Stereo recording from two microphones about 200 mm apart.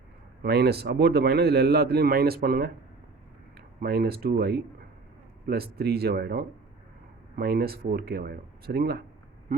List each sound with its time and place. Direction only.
0.4 s speech: 55° right (ahead or behind)
3.8 s speech: 50° right (ahead or behind)